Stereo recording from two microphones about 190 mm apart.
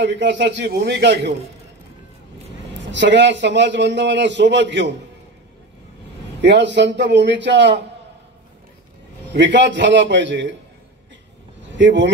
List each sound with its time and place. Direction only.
0.0 s a man's voice: 65° right (ahead or behind)
2.8 s a man's voice: 70° right (ahead or behind)
6.4 s a man's voice: 65° right (ahead or behind)
9.3 s a man's voice: 70° right (ahead or behind)
11.8 s a man's voice: 70° right (ahead or behind)